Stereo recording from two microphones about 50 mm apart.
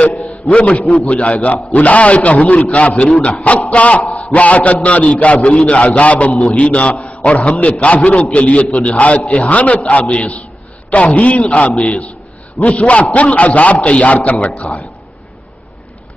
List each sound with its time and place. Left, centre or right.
0.2 s a man's voice: left